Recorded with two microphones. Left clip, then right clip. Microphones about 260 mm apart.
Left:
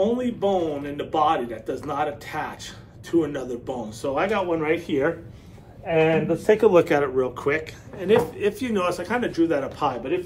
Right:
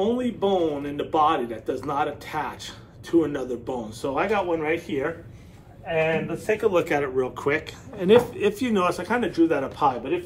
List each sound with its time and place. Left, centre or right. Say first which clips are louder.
0.0 s a man's voice: left 1 dB; centre
5.9 s a man's voice: left 4 dB; left
6.7 s speech: left 4 dB; centre
8.0 s a man's voice: right 2 dB; centre